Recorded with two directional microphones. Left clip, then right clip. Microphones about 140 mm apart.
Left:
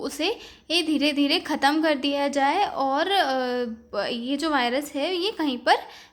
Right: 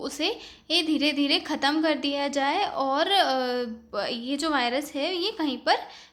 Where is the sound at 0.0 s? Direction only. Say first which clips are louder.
Left 2 dB; 20° left (ahead or behind).